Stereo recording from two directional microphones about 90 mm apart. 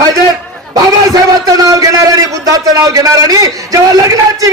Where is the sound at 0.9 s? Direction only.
45° right (ahead or behind).